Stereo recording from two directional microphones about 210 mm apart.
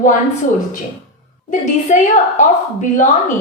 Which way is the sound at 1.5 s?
35° left (ahead or behind).